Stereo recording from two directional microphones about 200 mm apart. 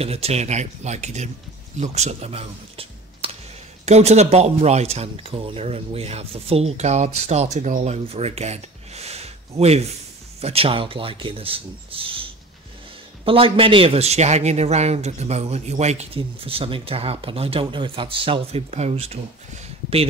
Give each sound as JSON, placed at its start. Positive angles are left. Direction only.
{"t": 0.0, "sound": "speech", "side_deg": -30}